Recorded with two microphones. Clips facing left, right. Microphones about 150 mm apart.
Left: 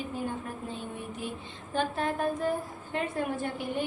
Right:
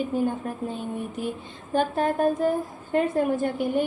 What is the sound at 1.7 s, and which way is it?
Speech, 45° right (ahead or behind).